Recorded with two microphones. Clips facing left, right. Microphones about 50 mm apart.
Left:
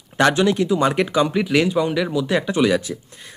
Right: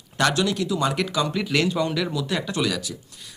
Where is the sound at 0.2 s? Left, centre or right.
Left.